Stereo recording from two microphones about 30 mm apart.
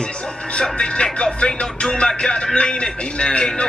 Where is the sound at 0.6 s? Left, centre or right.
Left.